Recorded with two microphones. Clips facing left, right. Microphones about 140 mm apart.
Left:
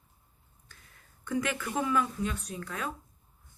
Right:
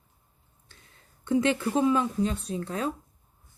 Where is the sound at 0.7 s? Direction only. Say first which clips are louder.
Right 1 dB; 25° right (ahead or behind).